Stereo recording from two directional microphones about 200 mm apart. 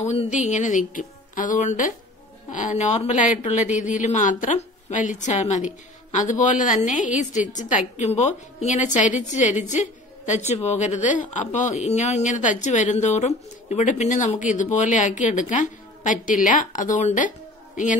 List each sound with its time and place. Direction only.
0.0 s a woman's voice: 35° left (ahead or behind)